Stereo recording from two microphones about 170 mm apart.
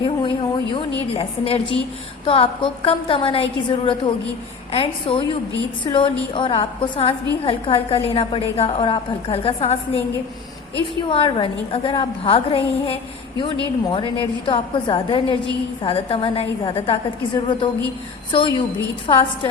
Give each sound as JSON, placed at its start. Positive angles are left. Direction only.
{"t": 0.0, "sound": "a sound", "side_deg": 30}
{"t": 2.2, "sound": "a woman's voice", "side_deg": 35}
{"t": 11.1, "sound": "a woman's voice", "side_deg": 30}